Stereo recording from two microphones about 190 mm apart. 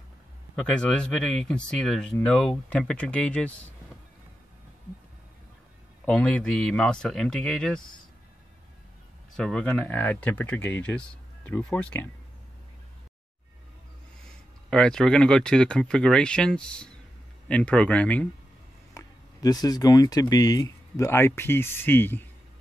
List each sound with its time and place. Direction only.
0.6 s speech: 5° left (ahead or behind)
6.0 s speech: 5° left (ahead or behind)
9.4 s speech: 5° left (ahead or behind)
14.7 s speech: 5° left (ahead or behind)
18.9 s speech: 20° left (ahead or behind)